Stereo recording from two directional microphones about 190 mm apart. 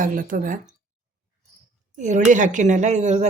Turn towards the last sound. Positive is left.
turn(degrees=-40)  # may be behind; listen again after turning